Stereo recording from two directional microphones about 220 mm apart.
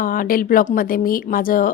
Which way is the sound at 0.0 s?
40° left (ahead or behind).